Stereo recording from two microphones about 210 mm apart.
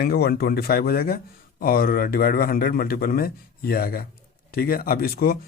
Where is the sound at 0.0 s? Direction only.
50° left (ahead or behind).